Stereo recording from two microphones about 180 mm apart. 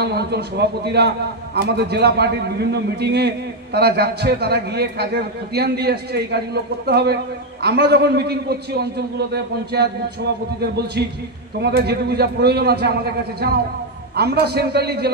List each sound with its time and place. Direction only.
0.0 s a man's voice: 65° right (ahead or behind)